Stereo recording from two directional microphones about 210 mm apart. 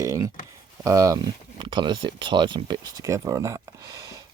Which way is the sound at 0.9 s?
15° right (ahead or behind).